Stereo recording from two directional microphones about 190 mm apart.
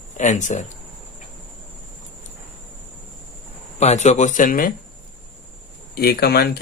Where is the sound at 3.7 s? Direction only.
35° left (ahead or behind).